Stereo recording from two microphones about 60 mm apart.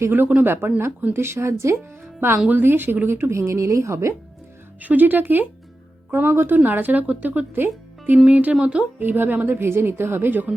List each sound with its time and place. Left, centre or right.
0.0 s speech: right
1.1 s speech: right
2.5 s speech: right
4.8 s speech: right
6.1 s speech: right; by 8.9 s centre
9.0 s speech: right